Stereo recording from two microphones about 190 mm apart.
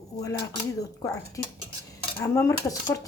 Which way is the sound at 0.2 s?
15° left (ahead or behind).